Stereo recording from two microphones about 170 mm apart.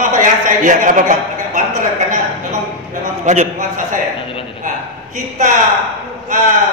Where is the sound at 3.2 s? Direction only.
50° right (ahead or behind).